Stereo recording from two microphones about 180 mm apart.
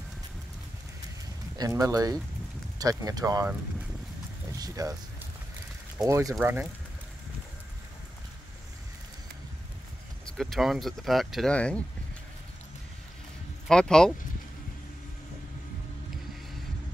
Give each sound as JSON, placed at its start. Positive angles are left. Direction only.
{"t": 1.6, "sound": "speech", "side_deg": -20}
{"t": 4.5, "sound": "a sound", "side_deg": -20}
{"t": 6.0, "sound": "speech", "side_deg": -20}
{"t": 10.2, "sound": "speech", "side_deg": 0}
{"t": 13.7, "sound": "speech", "side_deg": 5}